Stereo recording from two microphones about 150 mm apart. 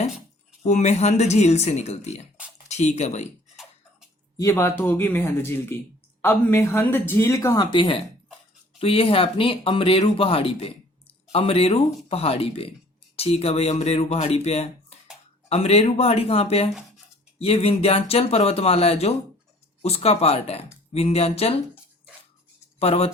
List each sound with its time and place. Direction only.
0.6 s speech: 50° left (ahead or behind)
4.4 s speech: 20° left (ahead or behind); by 21.6 s 40° left (ahead or behind)
22.8 s speech: 40° left (ahead or behind)